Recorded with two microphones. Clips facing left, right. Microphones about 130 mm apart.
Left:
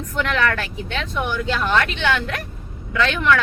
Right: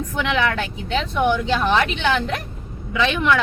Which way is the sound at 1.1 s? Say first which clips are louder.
Right 4 dB; centre (ahead or behind).